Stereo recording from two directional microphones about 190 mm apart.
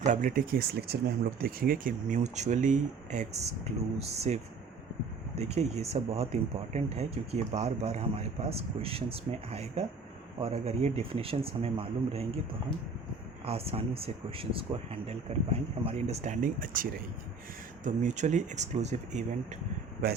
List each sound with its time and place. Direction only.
0.0 s speech: 40° right (ahead or behind)
13.4 s speech: 30° right (ahead or behind)